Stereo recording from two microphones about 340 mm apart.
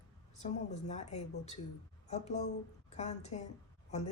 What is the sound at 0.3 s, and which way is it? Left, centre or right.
Speech, centre.